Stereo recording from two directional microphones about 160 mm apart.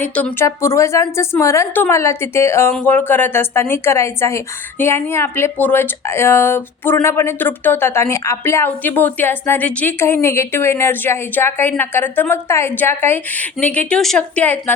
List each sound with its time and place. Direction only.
0.0 s a woman's voice: 10° left (ahead or behind)